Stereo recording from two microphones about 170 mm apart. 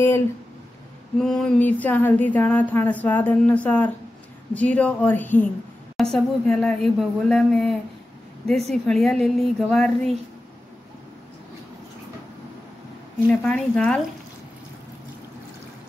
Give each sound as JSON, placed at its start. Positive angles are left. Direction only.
{"t": 1.2, "sound": "a sound", "side_deg": 5}
{"t": 5.9, "sound": "speech", "side_deg": 0}
{"t": 8.7, "sound": "speech", "side_deg": 0}
{"t": 13.3, "sound": "speech", "side_deg": 5}